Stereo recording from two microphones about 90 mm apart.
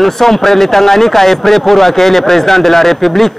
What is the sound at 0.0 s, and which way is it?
Speech, 5° left (ahead or behind).